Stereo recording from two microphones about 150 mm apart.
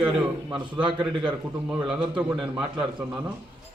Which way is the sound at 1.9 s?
5° right (ahead or behind).